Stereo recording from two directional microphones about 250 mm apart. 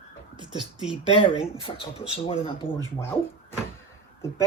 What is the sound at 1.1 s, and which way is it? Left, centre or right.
Speech, left.